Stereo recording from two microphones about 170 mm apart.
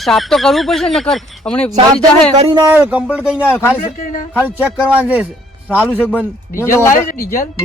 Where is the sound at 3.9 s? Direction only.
55° left (ahead or behind).